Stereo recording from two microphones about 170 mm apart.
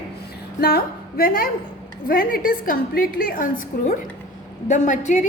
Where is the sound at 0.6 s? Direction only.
60° left (ahead or behind).